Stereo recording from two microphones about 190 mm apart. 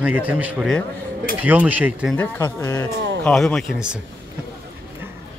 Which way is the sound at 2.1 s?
10° left (ahead or behind).